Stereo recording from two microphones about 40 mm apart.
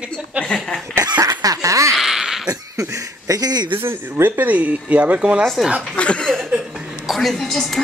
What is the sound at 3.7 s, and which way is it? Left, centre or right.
Speech, right.